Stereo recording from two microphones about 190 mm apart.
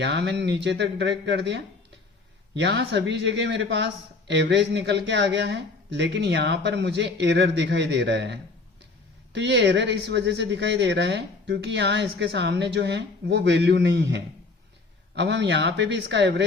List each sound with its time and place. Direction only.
0.0 s speech: 60° right (ahead or behind)